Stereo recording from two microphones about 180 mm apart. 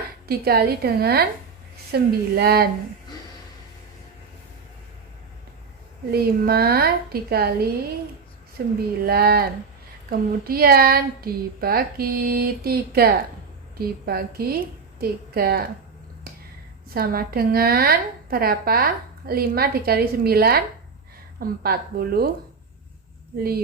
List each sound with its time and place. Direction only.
0.3 s a woman's voice: 60° right (ahead or behind)
6.1 s a woman's voice: 60° right (ahead or behind)
16.3 s finger snapping: 55° right (ahead or behind)
16.9 s a woman's voice: 55° right (ahead or behind)